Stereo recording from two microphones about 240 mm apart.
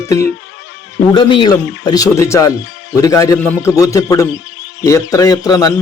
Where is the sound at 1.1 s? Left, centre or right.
Left.